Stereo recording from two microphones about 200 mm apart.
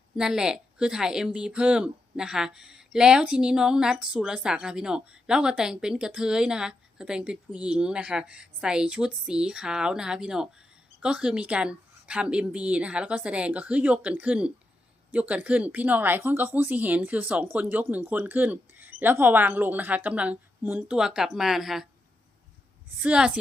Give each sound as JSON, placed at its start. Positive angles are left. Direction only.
{"t": 0.2, "sound": "a woman's voice", "side_deg": -5}
{"t": 23.0, "sound": "a woman's voice", "side_deg": -5}